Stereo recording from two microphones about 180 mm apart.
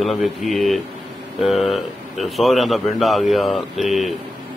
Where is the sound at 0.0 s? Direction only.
Centre (ahead or behind).